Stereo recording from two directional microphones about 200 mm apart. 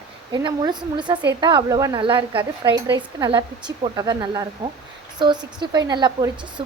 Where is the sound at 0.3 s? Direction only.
20° right (ahead or behind).